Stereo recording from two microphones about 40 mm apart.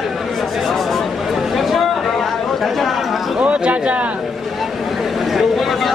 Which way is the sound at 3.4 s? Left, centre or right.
Right.